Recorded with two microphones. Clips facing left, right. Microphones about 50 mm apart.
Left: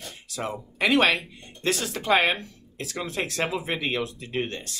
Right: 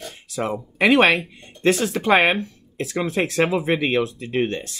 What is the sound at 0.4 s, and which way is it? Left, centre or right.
Speech, right.